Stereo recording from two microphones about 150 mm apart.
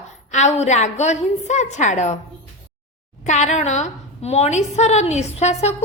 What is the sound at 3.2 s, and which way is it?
A woman's voice, 50° left (ahead or behind).